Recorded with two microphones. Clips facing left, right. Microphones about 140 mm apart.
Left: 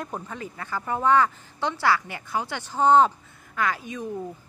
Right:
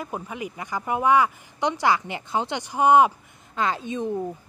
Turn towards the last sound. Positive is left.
turn(degrees=-20)  # may be behind; listen again after turning